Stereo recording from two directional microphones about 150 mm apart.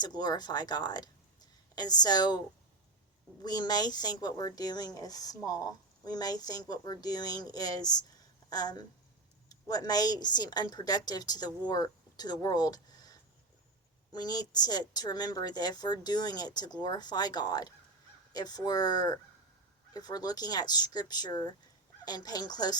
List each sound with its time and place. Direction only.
0.0 s speech: 25° left (ahead or behind)
3.4 s speech: 25° left (ahead or behind)